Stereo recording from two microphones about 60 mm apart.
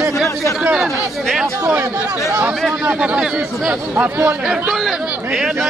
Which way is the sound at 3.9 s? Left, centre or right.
Right.